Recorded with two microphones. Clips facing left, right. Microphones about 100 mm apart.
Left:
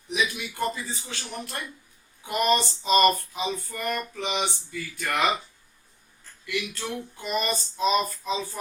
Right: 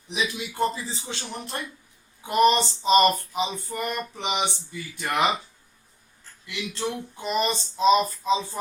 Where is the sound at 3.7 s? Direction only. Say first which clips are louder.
Right 1 dB; 20° right (ahead or behind).